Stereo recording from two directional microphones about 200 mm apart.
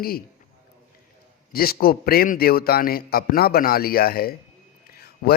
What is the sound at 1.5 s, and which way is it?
Speech, 50° left (ahead or behind).